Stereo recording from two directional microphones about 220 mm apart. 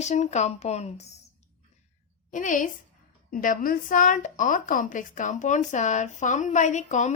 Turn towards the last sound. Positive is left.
turn(degrees=30)  # may be behind; listen again after turning